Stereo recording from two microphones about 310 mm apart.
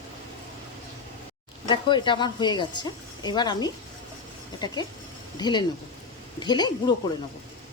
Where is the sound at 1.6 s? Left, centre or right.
Centre.